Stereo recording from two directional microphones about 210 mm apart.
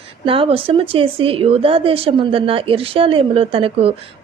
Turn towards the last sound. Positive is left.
turn(degrees=-25)  # may be behind; listen again after turning